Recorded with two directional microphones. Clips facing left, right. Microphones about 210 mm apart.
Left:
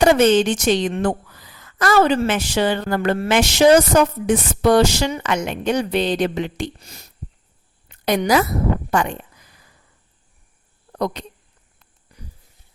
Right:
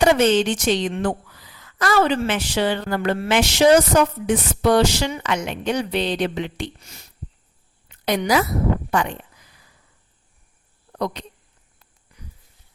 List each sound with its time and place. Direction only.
0.0 s a woman's voice: 45° left (ahead or behind)
7.9 s a sound: 45° left (ahead or behind)
8.9 s speech: 45° left (ahead or behind)
10.9 s speech: 45° left (ahead or behind)